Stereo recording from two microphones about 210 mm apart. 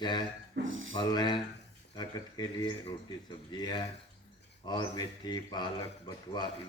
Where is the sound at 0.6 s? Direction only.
65° right (ahead or behind).